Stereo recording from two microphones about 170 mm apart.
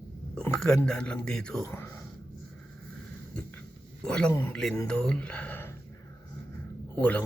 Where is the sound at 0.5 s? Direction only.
5° left (ahead or behind).